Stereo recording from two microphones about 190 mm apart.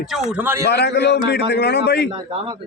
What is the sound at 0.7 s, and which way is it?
A man's voice, 60° left (ahead or behind).